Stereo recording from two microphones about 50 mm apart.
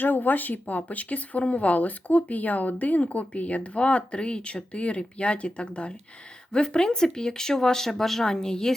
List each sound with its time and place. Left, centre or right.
0.0 s speech: left; by 8.7 s centre